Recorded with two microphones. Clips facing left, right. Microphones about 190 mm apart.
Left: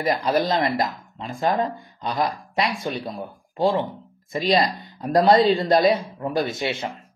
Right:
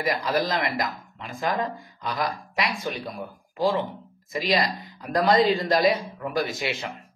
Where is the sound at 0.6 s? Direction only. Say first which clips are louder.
Left 4 dB; 30° left (ahead or behind).